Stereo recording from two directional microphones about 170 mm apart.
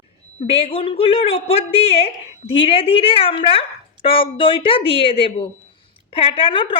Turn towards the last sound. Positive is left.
turn(degrees=30)  # may be behind; listen again after turning